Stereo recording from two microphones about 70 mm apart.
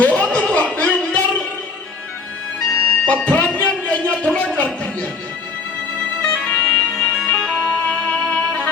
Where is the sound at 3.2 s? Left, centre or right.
Centre.